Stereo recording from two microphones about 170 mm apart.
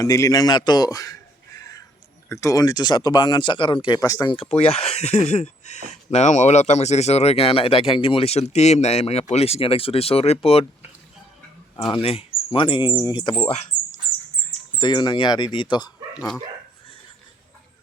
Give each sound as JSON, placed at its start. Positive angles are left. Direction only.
{"t": 0.0, "sound": "speech", "side_deg": 20}
{"t": 12.0, "sound": "speech", "side_deg": 35}
{"t": 14.8, "sound": "speech", "side_deg": 25}